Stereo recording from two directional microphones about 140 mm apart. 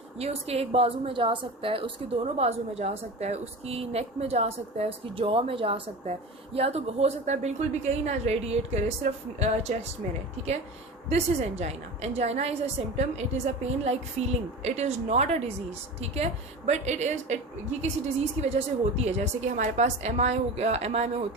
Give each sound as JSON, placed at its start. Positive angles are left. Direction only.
{"t": 0.2, "sound": "a woman's voice", "side_deg": -45}
{"t": 18.4, "sound": "a woman's voice", "side_deg": -50}